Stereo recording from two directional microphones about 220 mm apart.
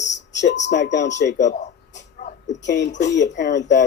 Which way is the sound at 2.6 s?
50° left (ahead or behind).